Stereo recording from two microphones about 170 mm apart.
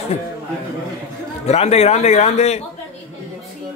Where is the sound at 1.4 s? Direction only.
40° left (ahead or behind).